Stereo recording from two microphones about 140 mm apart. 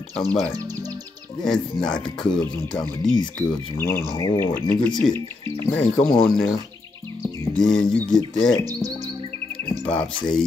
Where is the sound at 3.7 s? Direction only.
15° left (ahead or behind).